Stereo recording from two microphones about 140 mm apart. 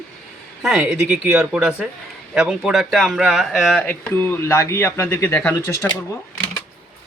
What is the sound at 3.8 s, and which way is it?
Speech, 15° left (ahead or behind).